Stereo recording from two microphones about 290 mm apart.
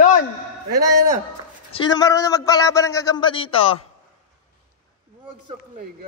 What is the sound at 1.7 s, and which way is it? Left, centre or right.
A man's voice, centre.